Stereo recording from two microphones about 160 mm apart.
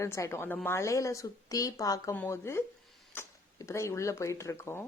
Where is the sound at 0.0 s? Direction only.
20° left (ahead or behind).